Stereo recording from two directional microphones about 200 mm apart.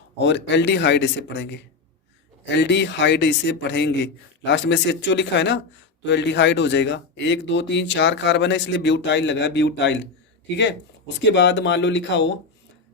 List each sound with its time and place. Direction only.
0.2 s a man's voice: 60° left (ahead or behind)